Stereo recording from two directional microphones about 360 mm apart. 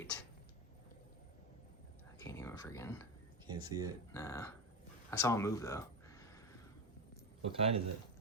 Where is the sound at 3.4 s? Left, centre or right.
Centre.